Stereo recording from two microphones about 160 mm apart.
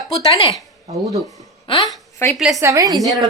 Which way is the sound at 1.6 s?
30° left (ahead or behind).